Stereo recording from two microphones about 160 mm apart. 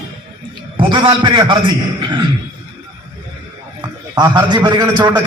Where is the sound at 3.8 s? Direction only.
25° right (ahead or behind).